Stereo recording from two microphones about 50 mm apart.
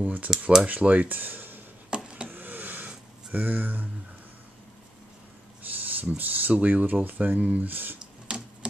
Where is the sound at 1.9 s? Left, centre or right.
Centre.